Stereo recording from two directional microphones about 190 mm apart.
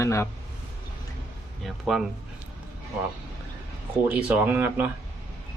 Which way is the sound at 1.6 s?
Centre (ahead or behind).